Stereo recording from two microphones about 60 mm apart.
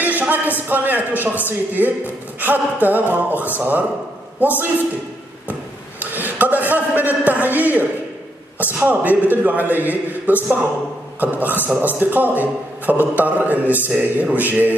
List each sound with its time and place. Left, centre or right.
0.0 s a man's voice: right
6.1 s a man's voice: right